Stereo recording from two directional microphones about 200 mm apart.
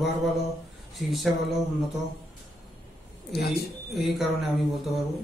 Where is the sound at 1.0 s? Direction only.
Centre (ahead or behind).